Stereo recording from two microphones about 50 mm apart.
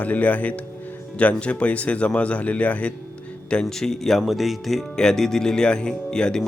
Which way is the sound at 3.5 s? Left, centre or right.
Centre.